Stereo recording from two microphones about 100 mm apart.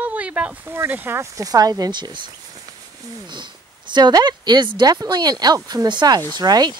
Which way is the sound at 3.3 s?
50° right (ahead or behind).